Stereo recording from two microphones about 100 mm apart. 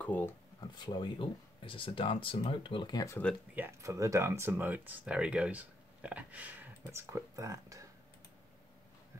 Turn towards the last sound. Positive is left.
turn(degrees=-35)  # may be behind; listen again after turning